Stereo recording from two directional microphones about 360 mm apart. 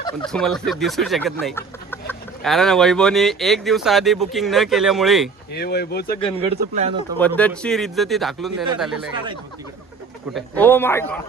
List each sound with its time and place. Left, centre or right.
0.3 s speech: centre
5.5 s speech: left
6.1 s speech: centre
6.6 s speech: centre
7.2 s speech: centre
10.3 s speech: centre